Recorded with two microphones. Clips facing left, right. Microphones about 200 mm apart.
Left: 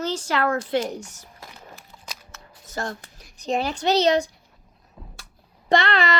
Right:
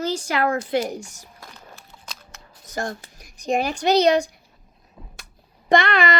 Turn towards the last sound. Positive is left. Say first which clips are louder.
# right 2 dB
turn(degrees=-15)  # may be behind; listen again after turning